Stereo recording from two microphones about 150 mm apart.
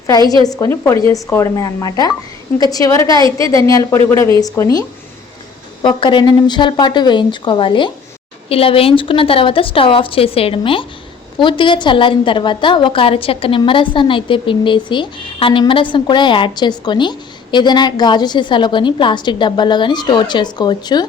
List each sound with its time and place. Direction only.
0.1 s a woman's voice: 25° left (ahead or behind)
5.8 s a woman's voice: 35° left (ahead or behind)